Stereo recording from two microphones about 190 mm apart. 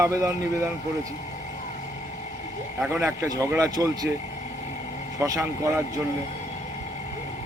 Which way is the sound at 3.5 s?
15° right (ahead or behind).